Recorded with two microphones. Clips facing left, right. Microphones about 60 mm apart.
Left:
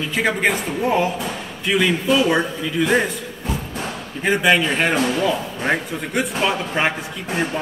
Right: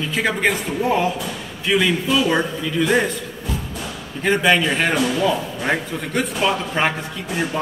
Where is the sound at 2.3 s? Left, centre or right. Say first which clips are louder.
Even; centre.